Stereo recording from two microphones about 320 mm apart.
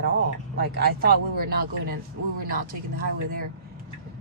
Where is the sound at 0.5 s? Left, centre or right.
Right.